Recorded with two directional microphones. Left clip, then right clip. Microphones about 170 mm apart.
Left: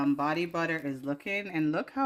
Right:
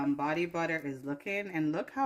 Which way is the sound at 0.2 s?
55° left (ahead or behind).